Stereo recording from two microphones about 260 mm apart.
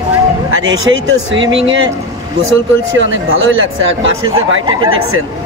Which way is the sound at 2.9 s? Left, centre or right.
Right.